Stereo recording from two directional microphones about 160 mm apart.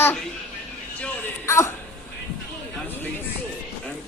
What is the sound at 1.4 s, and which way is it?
Speech, 20° left (ahead or behind).